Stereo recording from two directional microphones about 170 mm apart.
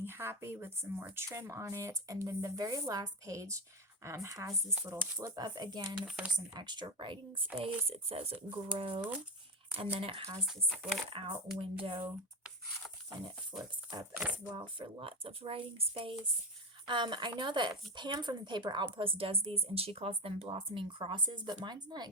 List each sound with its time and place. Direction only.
0.0 s a woman's voice: 15° right (ahead or behind)
6.1 s speech: 5° right (ahead or behind)
6.3 s a woman's voice: 25° right (ahead or behind)
9.0 s speech: 10° right (ahead or behind)
9.7 s speech: 35° right (ahead or behind)
10.4 s speech: centre (ahead or behind)
11.1 s speech: 30° right (ahead or behind)
14.2 s speech: 10° right (ahead or behind)
14.5 s a woman's voice: 30° right (ahead or behind)